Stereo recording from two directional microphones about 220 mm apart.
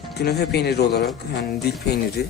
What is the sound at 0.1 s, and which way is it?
Speech, 45° left (ahead or behind).